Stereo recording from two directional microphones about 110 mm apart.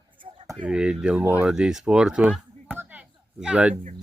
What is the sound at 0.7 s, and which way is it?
Speech, 10° right (ahead or behind).